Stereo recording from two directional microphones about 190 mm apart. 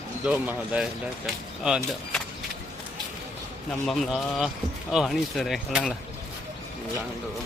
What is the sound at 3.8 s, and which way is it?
Speech, centre (ahead or behind).